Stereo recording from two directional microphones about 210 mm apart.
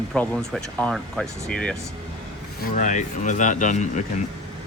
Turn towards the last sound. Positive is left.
turn(degrees=35)  # may be behind; listen again after turning